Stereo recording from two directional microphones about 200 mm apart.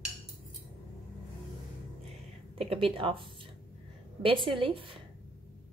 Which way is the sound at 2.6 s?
30° right (ahead or behind).